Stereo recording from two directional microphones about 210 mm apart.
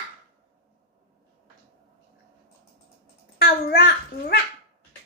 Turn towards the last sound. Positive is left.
turn(degrees=50)  # may be behind; listen again after turning